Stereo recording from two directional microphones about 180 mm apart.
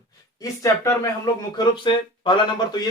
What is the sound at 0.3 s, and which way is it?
Speech, 20° left (ahead or behind).